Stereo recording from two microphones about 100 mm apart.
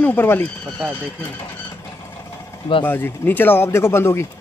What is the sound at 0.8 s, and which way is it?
Speech, 10° right (ahead or behind).